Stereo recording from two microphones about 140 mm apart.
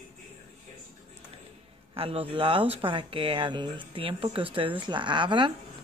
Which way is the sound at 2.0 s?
40° right (ahead or behind).